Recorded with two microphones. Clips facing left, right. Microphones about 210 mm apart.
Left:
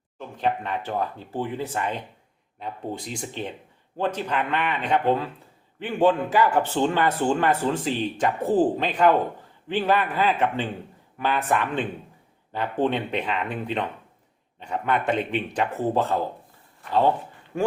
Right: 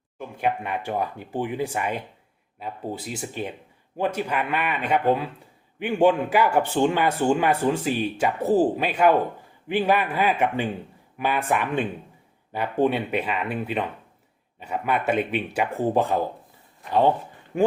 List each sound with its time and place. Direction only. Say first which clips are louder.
0.2 s speech: even; 10° right (ahead or behind)
17.5 s speech: right 4 dB; 15° right (ahead or behind)